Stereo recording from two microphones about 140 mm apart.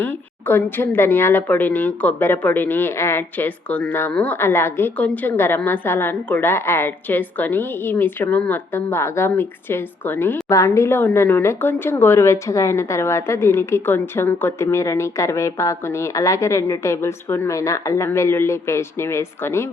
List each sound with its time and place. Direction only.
0.0 s a woman's voice: 15° left (ahead or behind)